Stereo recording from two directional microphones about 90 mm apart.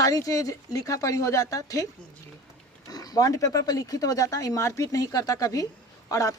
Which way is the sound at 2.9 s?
45° left (ahead or behind).